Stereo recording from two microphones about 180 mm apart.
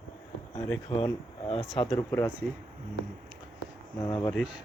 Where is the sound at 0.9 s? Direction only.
30° left (ahead or behind).